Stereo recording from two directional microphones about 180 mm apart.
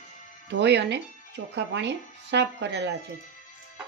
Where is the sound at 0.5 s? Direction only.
70° right (ahead or behind).